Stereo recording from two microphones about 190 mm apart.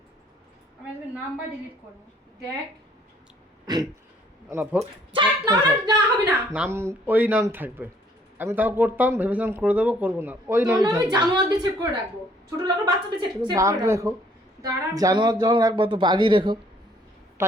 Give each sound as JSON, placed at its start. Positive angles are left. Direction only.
{"t": 3.7, "sound": "a woman's voice", "side_deg": -20}
{"t": 4.4, "sound": "speech", "side_deg": -10}
{"t": 4.8, "sound": "speech", "side_deg": -25}
{"t": 6.5, "sound": "a woman's voice", "side_deg": -10}